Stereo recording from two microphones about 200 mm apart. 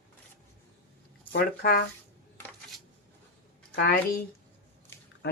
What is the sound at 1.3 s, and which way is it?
Speech, 50° left (ahead or behind).